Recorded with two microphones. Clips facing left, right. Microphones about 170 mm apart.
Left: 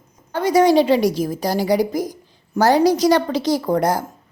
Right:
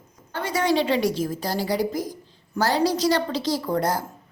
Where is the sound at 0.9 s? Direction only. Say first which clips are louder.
Left 6 dB; 40° left (ahead or behind).